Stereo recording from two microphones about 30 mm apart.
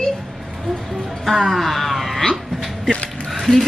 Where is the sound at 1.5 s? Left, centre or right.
Centre.